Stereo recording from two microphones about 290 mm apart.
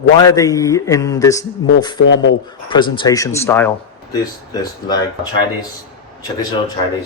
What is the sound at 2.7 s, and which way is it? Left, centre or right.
Speech, centre.